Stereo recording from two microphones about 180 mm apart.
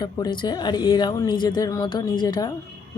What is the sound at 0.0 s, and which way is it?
Speech, 25° left (ahead or behind).